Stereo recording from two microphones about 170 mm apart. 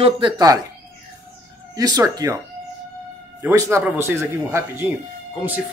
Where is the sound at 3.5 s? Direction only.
15° right (ahead or behind).